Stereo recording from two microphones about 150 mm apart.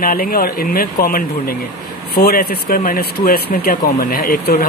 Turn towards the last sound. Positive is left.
turn(degrees=85)